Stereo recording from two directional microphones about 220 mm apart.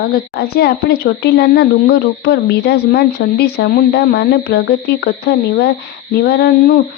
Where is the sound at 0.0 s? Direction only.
45° left (ahead or behind).